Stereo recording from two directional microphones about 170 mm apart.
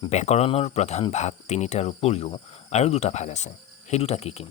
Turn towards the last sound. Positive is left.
turn(degrees=35)  # may be behind; listen again after turning